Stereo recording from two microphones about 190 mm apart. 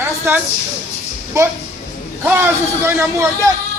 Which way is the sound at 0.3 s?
15° right (ahead or behind).